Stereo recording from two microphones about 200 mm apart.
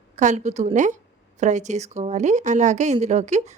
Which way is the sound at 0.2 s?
35° right (ahead or behind).